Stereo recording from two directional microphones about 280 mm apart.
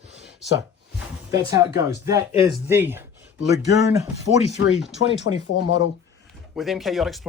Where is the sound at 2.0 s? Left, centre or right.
Centre.